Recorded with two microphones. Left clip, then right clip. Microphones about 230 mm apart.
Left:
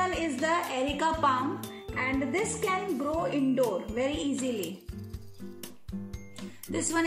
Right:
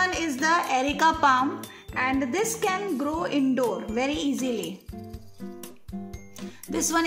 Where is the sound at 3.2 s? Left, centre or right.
Right.